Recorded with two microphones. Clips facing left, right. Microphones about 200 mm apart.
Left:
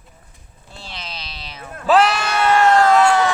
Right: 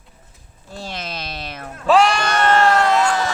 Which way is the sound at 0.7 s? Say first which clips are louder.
Right 6 dB; 45° right (ahead or behind).